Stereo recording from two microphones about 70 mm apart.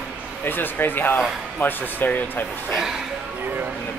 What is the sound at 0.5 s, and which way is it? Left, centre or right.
Speech, left.